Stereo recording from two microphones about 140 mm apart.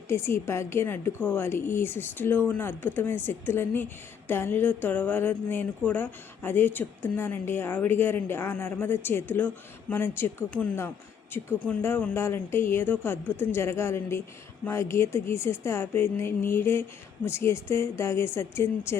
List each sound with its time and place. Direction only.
0.1 s speech: 20° left (ahead or behind)